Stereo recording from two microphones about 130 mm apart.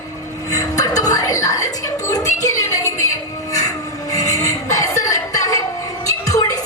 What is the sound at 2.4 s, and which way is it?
Train, 25° left (ahead or behind).